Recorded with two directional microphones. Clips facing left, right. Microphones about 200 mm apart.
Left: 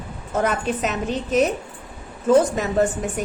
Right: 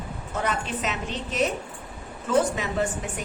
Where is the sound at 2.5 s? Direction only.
45° left (ahead or behind).